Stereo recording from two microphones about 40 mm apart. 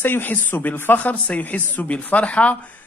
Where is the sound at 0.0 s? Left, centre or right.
Left.